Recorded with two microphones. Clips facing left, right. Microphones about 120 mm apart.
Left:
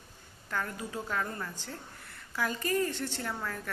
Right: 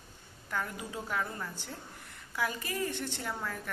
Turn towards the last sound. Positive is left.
turn(degrees=-15)  # may be behind; listen again after turning